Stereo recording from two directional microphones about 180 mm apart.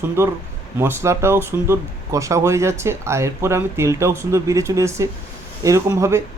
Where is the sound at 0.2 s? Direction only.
15° right (ahead or behind).